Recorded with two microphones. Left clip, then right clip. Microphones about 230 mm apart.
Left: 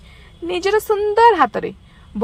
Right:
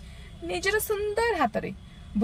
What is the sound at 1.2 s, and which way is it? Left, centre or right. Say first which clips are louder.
Speech: left 15 dB; left.